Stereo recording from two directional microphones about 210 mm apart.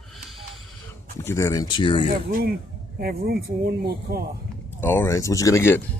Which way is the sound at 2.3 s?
45° right (ahead or behind).